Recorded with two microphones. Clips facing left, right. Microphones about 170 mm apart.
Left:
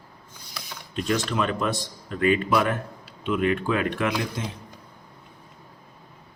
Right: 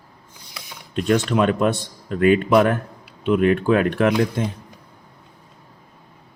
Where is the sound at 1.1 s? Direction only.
55° right (ahead or behind).